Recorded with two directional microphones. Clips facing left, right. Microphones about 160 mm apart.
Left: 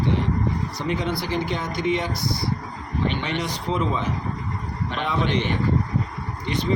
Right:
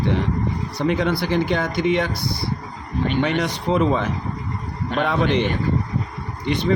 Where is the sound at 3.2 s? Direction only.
55° right (ahead or behind).